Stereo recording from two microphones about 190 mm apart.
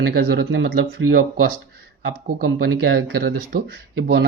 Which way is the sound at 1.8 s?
70° right (ahead or behind).